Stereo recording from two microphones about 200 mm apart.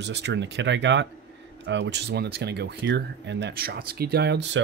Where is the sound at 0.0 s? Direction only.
60° right (ahead or behind).